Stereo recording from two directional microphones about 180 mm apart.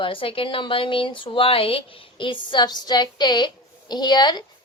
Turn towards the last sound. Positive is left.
turn(degrees=25)  # may be behind; listen again after turning